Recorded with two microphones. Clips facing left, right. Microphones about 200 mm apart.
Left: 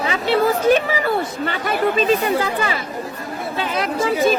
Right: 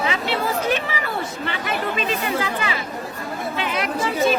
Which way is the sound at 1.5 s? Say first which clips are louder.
Left 6 dB; 40° left (ahead or behind).